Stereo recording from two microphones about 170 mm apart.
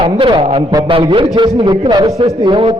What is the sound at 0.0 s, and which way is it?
A man's voice, 30° right (ahead or behind).